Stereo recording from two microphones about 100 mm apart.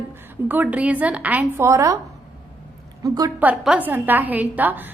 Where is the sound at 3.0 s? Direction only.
40° right (ahead or behind).